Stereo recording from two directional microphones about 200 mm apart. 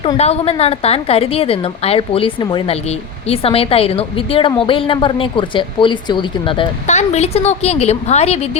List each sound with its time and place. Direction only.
0.0 s a woman's voice: 30° left (ahead or behind)
6.8 s a woman's voice: 35° left (ahead or behind)